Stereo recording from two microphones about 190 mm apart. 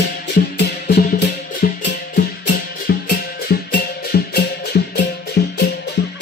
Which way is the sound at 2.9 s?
55° left (ahead or behind).